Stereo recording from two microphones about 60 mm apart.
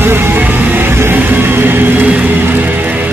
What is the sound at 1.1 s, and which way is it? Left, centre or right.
Music, right.